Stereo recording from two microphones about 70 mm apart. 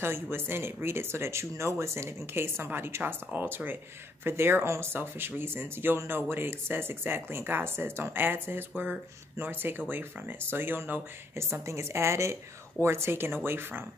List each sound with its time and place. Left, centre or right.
0.0 s speech: right